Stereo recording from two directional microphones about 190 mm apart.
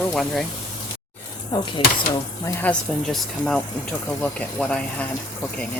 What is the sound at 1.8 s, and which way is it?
Speech, 30° left (ahead or behind).